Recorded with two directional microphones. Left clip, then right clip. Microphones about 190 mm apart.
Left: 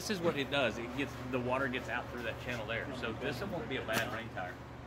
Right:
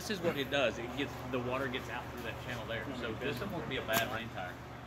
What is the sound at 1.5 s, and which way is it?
Speech, 40° left (ahead or behind).